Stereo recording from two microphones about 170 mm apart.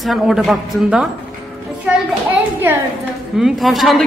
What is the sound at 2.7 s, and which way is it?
Speech, 15° right (ahead or behind).